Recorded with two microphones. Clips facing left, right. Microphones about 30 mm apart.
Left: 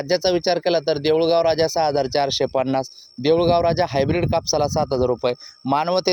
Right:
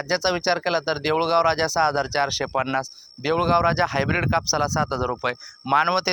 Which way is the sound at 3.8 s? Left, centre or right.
Left.